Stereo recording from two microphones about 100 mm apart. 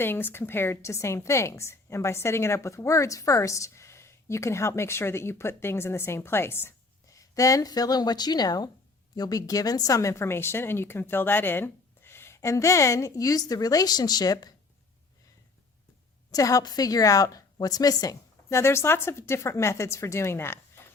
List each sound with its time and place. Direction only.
0.0 s a woman's voice: 20° left (ahead or behind)
7.2 s a woman's voice: 35° left (ahead or behind)
16.3 s a woman's voice: 35° left (ahead or behind)
18.4 s a woman's voice: 25° left (ahead or behind)